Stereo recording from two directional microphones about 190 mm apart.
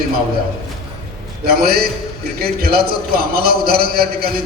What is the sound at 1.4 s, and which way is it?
A man's voice, 50° right (ahead or behind).